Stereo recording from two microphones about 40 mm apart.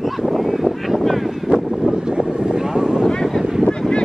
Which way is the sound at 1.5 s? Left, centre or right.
Right.